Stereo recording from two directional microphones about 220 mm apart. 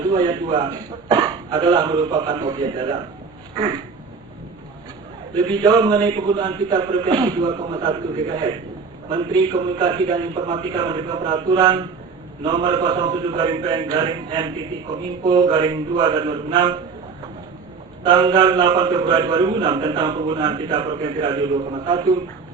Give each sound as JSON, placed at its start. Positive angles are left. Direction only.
{"t": 0.1, "sound": "a man's voice", "side_deg": -20}
{"t": 5.3, "sound": "a man's voice", "side_deg": -20}
{"t": 18.0, "sound": "a man's voice", "side_deg": -20}